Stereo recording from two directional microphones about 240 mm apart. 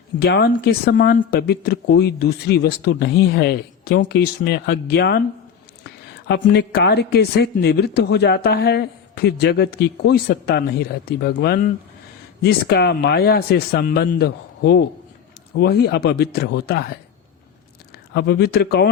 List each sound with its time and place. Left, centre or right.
0.2 s speech: left
6.2 s a woman's voice: left
18.1 s a woman's voice: left